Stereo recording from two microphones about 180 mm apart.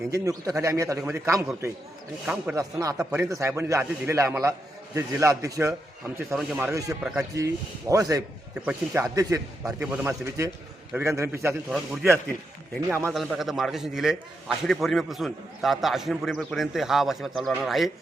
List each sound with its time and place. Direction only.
0.1 s a man's voice: 20° right (ahead or behind)
2.6 s speech: 20° right (ahead or behind)
3.0 s a man's voice: 5° right (ahead or behind)
3.2 s a man's voice: 15° right (ahead or behind)
6.3 s a man's voice: 5° right (ahead or behind)
6.7 s speech: 20° right (ahead or behind)
7.0 s a man's voice: 5° right (ahead or behind)
7.3 s a man's voice: 15° right (ahead or behind)
9.6 s a man's voice: 5° right (ahead or behind)
13.1 s a man's voice: centre (ahead or behind)